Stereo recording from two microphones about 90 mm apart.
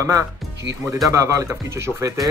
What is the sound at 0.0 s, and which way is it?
Speech, 35° right (ahead or behind).